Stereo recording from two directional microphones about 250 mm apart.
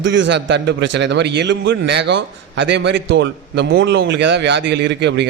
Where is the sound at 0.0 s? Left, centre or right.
Right.